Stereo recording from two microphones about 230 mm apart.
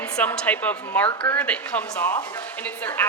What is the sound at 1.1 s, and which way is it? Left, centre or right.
Speech, left.